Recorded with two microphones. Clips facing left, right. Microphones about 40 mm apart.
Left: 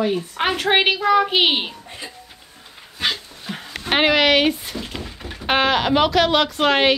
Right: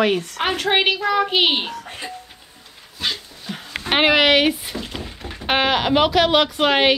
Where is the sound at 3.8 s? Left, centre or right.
Centre.